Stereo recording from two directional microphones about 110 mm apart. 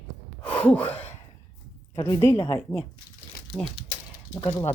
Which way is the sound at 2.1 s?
25° left (ahead or behind).